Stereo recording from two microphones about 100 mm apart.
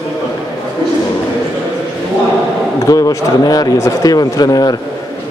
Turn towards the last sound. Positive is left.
turn(degrees=40)  # may be behind; listen again after turning